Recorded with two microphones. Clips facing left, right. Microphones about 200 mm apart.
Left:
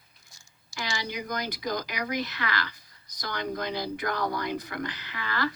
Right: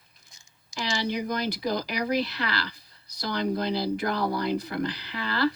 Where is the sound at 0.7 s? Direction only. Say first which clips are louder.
Right 3 dB; 20° right (ahead or behind).